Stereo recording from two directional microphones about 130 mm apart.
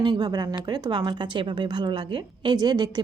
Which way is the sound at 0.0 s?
35° right (ahead or behind).